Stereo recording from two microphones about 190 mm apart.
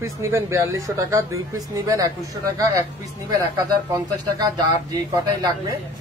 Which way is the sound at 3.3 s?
20° right (ahead or behind).